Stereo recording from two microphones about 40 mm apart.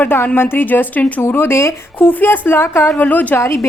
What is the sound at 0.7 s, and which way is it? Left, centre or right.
Speech, left.